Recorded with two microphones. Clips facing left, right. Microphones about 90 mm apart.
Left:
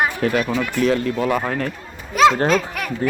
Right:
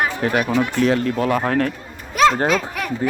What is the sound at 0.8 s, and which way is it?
Speech, 40° right (ahead or behind).